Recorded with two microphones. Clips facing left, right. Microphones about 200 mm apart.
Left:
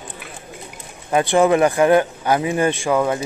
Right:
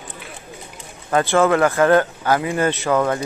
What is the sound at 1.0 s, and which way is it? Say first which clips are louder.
Speech: left 1 dB; 15° left (ahead or behind).